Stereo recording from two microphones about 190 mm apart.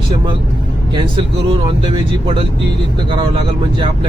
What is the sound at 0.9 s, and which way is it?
Speech, 25° right (ahead or behind).